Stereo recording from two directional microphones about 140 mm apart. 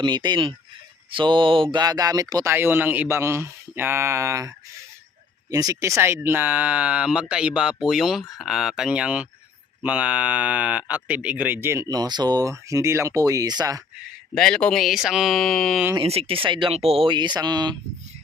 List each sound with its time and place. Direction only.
0.0 s speech: 30° right (ahead or behind)
14.3 s speech: 5° left (ahead or behind)
16.0 s speech: 45° right (ahead or behind)